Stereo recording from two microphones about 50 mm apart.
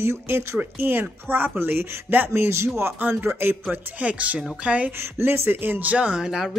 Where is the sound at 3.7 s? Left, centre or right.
Right.